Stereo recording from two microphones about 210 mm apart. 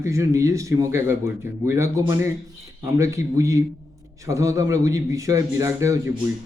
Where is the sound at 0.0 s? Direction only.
15° right (ahead or behind).